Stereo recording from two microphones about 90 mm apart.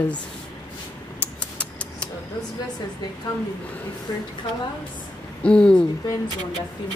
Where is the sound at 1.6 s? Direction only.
15° left (ahead or behind).